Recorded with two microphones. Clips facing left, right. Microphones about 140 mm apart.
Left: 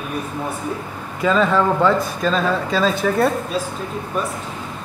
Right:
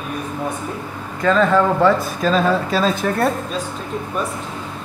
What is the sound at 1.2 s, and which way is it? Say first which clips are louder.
Speech: right 2 dB; 5° left (ahead or behind).